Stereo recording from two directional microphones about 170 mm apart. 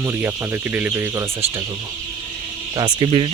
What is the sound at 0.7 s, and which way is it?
Speech, 10° right (ahead or behind).